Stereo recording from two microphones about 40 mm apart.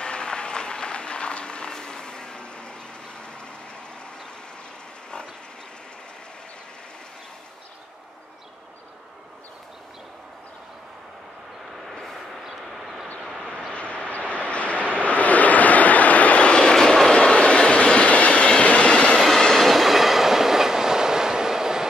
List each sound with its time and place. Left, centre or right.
0.0 s applause: left
11.9 s vehicle: centre
12.3 s vehicle: centre
13.4 s vehicle: left
16.7 s vehicle: centre
17.1 s train: left
19.1 s train: centre
19.6 s train: centre